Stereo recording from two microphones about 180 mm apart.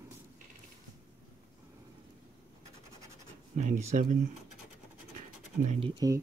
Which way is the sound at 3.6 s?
40° right (ahead or behind).